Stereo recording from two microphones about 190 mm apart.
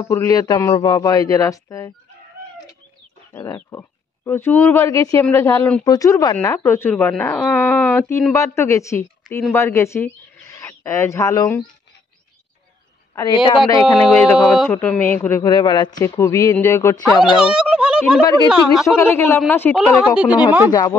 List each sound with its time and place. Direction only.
0.0 s a man's voice: 15° left (ahead or behind)
3.3 s speech: 15° left (ahead or behind)
13.1 s a woman's voice: 20° left (ahead or behind)
14.0 s speech: centre (ahead or behind)
14.7 s speech: 10° left (ahead or behind)
17.2 s speech: 5° right (ahead or behind)
18.2 s a man's voice: 20° left (ahead or behind)
18.5 s speech: centre (ahead or behind)
18.9 s speech: 15° left (ahead or behind)